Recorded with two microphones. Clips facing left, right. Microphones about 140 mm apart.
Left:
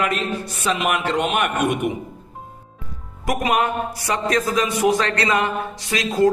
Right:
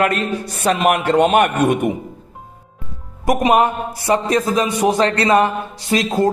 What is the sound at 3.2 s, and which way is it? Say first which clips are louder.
A man's voice: right 6 dB; 30° right (ahead or behind).